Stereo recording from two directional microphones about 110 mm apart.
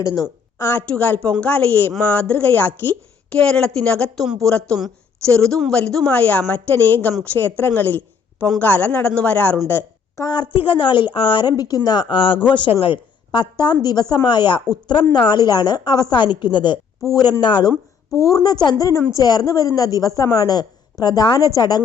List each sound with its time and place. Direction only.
0.0 s a woman's voice: 30° left (ahead or behind); by 9.6 s 15° left (ahead or behind)
9.6 s a sound: 20° left (ahead or behind)
10.2 s a woman's voice: 45° left (ahead or behind)
18.2 s a woman's voice: 30° left (ahead or behind)